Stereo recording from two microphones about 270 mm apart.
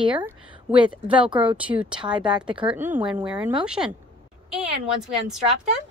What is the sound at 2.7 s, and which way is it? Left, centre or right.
Speech, centre.